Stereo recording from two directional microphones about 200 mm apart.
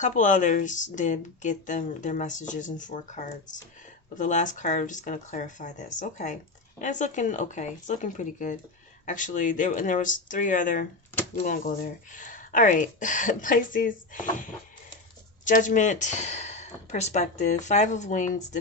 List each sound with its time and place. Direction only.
0.0 s speech: 40° left (ahead or behind)
15.4 s speech: 40° left (ahead or behind)